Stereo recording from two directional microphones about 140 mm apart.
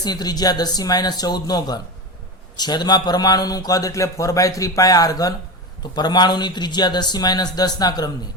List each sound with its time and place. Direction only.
0.0 s a man's voice: 30° left (ahead or behind)